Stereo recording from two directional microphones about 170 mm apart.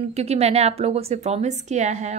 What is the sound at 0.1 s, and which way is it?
A woman's voice, 40° right (ahead or behind).